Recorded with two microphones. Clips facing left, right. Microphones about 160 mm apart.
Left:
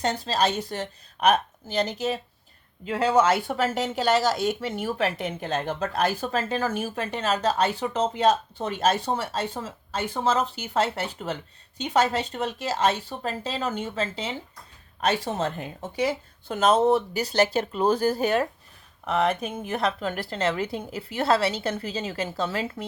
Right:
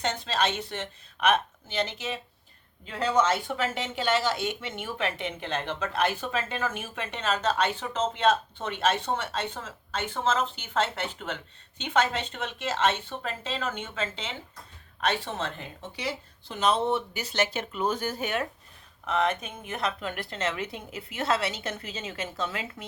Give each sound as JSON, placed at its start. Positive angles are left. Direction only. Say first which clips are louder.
{"t": 0.0, "sound": "speech", "louder": "left 4 dB", "side_deg": 40}